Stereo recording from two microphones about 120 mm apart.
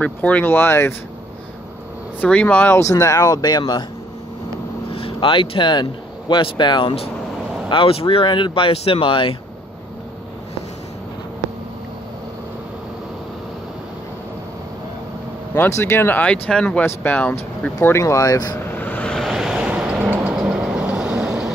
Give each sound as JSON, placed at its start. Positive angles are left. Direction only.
{"t": 0.0, "sound": "speech", "side_deg": 10}
{"t": 2.1, "sound": "speech", "side_deg": 10}
{"t": 2.8, "sound": "speech", "side_deg": 25}
{"t": 4.9, "sound": "speech", "side_deg": 50}
{"t": 15.5, "sound": "speech", "side_deg": 20}
{"t": 17.8, "sound": "speech", "side_deg": 25}
{"t": 18.6, "sound": "vehicle", "side_deg": 15}